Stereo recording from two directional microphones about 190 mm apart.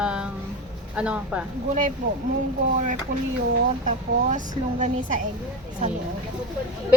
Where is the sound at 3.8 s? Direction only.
40° right (ahead or behind).